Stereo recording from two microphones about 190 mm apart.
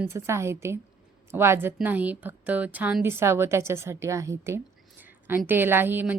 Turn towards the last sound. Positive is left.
turn(degrees=-10)  # may be behind; listen again after turning